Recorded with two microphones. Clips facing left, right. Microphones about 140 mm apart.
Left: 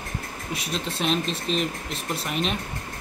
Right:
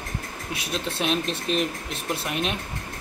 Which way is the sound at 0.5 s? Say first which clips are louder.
Right 1 dB; 5° right (ahead or behind).